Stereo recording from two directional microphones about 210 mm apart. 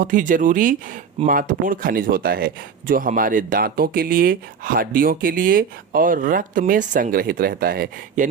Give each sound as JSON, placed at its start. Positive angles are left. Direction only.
{"t": 0.0, "sound": "speech", "side_deg": -40}